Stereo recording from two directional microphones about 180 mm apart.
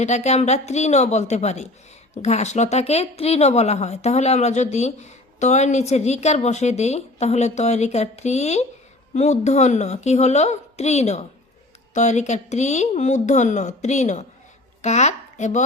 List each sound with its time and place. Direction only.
0.0 s speech: 40° left (ahead or behind)